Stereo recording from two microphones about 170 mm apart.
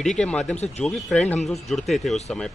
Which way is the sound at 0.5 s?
40° left (ahead or behind).